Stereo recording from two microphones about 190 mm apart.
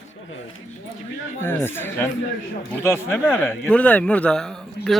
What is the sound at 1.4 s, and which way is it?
A man's voice, 10° left (ahead or behind).